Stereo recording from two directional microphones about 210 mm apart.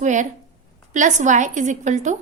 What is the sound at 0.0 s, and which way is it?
A woman's voice, 35° right (ahead or behind).